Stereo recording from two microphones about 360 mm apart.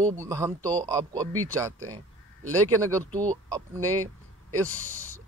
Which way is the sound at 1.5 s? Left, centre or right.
Centre.